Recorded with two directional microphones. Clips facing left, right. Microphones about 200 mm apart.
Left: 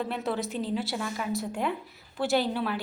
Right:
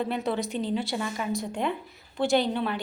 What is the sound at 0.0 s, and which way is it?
A woman's voice, centre (ahead or behind).